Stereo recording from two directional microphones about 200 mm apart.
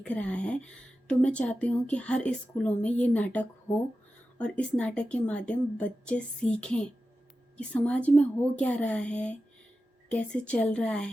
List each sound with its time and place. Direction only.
0.0 s a woman's voice: 5° left (ahead or behind)